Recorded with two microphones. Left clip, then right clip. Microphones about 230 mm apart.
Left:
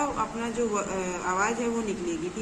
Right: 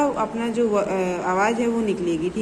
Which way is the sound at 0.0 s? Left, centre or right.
Centre.